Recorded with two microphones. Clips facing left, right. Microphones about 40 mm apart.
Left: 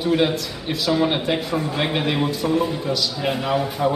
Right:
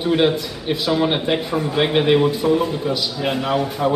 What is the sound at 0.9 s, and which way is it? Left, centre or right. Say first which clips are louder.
A man's voice: right 1 dB; centre.